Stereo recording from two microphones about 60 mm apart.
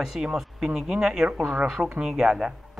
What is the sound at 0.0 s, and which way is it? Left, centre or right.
Speech, centre.